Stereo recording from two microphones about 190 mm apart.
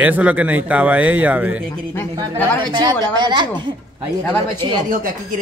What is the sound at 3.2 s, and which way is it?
Speech, 25° right (ahead or behind).